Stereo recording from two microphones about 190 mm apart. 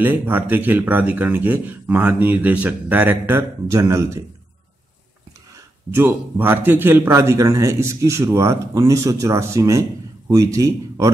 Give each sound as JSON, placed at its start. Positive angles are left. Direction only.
{"t": 0.0, "sound": "a man's voice", "side_deg": -10}
{"t": 5.9, "sound": "a man's voice", "side_deg": -10}